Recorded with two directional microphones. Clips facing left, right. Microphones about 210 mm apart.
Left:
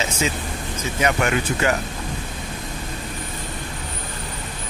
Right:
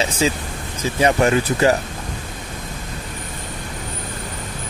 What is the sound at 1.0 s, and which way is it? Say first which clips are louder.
Speech: right 5 dB; 35° right (ahead or behind).